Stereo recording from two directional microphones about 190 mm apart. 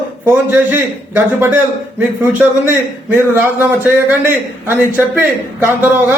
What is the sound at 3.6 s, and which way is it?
A man's voice, 10° right (ahead or behind).